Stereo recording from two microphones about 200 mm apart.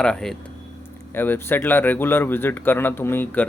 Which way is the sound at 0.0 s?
5° left (ahead or behind).